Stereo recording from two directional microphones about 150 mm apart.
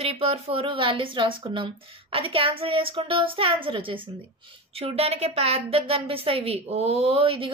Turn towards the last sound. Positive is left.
turn(degrees=-40)  # may be behind; listen again after turning